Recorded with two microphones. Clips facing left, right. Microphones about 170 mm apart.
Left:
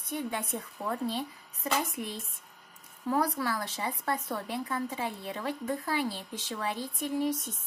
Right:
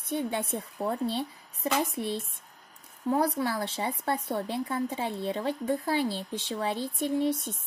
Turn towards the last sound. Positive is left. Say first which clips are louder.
# right 3 dB
turn(degrees=-30)  # may be behind; listen again after turning